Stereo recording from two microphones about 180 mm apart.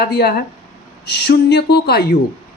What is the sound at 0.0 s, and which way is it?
A woman's voice, 60° left (ahead or behind).